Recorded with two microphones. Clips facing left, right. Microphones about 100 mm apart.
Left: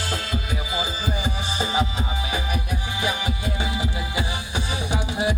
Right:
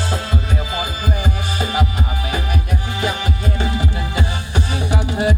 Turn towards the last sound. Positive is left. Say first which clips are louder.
# right 5 dB
turn(degrees=15)  # may be behind; listen again after turning